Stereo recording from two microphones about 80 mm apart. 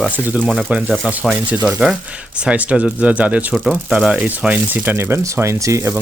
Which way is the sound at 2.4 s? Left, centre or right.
Centre.